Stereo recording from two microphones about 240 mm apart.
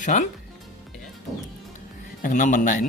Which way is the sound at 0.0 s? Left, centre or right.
Left.